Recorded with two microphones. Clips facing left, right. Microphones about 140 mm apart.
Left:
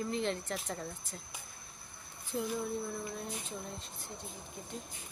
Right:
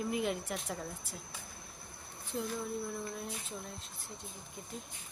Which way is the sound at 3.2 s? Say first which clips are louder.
Left 1 dB; centre (ahead or behind).